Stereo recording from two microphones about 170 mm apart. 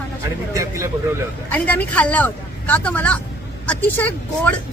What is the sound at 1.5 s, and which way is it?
Speech, 10° left (ahead or behind).